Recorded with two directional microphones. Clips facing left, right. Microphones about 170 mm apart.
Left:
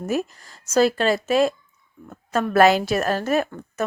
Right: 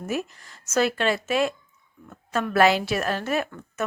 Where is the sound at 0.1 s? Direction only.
40° left (ahead or behind).